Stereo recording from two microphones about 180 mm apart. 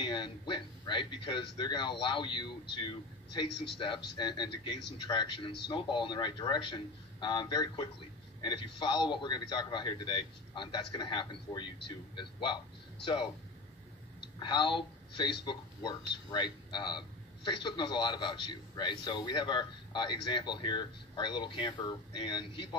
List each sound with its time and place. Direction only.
0.0 s a man's voice: 25° left (ahead or behind)
14.4 s a woman's voice: 25° left (ahead or behind)